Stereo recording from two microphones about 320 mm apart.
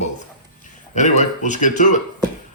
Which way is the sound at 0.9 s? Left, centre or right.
Left.